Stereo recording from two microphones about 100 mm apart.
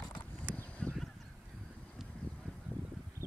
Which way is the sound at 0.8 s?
10° left (ahead or behind).